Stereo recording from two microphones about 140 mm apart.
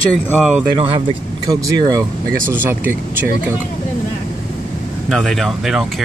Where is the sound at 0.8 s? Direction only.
35° right (ahead or behind).